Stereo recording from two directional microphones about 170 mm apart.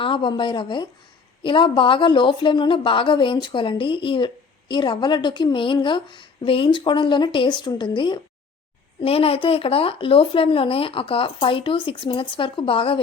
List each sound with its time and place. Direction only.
0.0 s a woman's voice: 30° left (ahead or behind)